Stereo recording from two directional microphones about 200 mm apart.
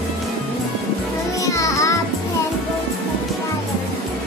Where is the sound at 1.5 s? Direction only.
15° left (ahead or behind).